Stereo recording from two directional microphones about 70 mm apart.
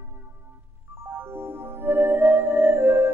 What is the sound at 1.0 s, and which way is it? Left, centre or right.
Music, right.